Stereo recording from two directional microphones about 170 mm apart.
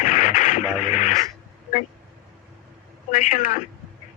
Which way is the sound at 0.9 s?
45° left (ahead or behind).